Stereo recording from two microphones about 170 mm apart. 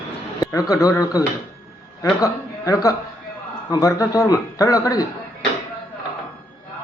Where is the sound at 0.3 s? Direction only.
20° left (ahead or behind).